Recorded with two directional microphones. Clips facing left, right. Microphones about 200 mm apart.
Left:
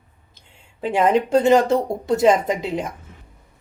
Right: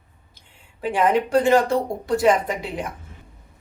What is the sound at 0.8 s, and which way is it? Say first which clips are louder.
Speech: left 2 dB; 25° left (ahead or behind).